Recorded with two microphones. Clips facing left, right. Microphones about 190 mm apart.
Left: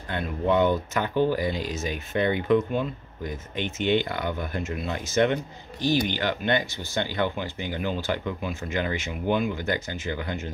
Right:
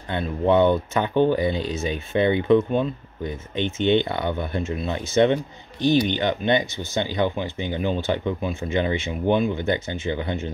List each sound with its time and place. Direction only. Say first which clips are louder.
0.1 s speech: right 4 dB; 25° right (ahead or behind)